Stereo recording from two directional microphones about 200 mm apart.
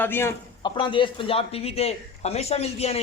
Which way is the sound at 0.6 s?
25° left (ahead or behind).